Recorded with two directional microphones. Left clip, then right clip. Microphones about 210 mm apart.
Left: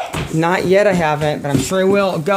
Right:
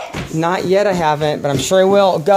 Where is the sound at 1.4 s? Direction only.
30° right (ahead or behind).